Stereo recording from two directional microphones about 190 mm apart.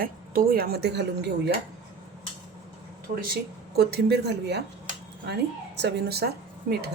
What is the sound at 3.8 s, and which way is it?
A woman's voice, 55° right (ahead or behind).